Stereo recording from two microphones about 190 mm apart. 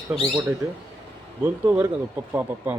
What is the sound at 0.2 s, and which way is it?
Speech, 15° right (ahead or behind).